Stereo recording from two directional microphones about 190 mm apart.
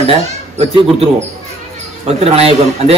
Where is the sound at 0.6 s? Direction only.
35° right (ahead or behind).